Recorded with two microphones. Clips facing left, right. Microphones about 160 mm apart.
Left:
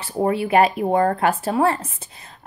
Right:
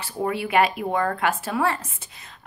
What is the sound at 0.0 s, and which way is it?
A woman's voice, 35° left (ahead or behind).